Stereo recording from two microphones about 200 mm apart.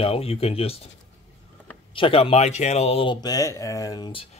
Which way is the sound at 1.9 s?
25° left (ahead or behind).